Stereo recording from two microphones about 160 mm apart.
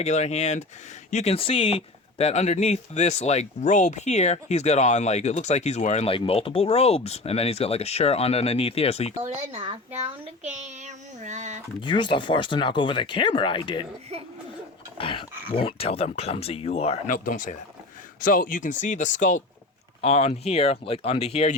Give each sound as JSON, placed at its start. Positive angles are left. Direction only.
{"t": 0.0, "sound": "speech", "side_deg": 45}
{"t": 9.2, "sound": "a child's voice", "side_deg": -45}
{"t": 11.8, "sound": "speech", "side_deg": 30}
{"t": 14.9, "sound": "speech", "side_deg": 35}
{"t": 17.1, "sound": "speech", "side_deg": 55}